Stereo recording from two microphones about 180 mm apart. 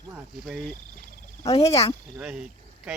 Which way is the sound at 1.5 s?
35° left (ahead or behind).